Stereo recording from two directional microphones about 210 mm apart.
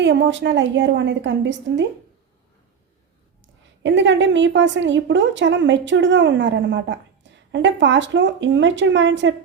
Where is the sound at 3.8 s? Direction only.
60° right (ahead or behind).